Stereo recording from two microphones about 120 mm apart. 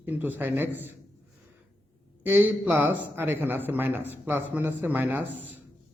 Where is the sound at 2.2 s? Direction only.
15° right (ahead or behind).